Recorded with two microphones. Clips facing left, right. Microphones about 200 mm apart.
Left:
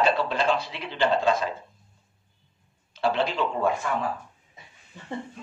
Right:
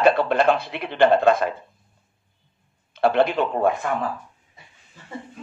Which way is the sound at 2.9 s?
55° right (ahead or behind).